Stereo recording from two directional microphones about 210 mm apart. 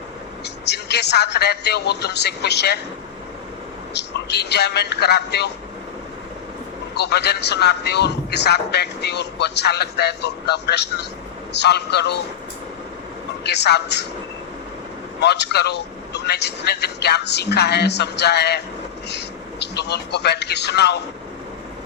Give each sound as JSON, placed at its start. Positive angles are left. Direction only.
{"t": 0.4, "sound": "a man's voice", "side_deg": 55}
{"t": 3.9, "sound": "a man's voice", "side_deg": 55}
{"t": 6.9, "sound": "a man's voice", "side_deg": 55}
{"t": 13.4, "sound": "a man's voice", "side_deg": 55}
{"t": 15.2, "sound": "a man's voice", "side_deg": 55}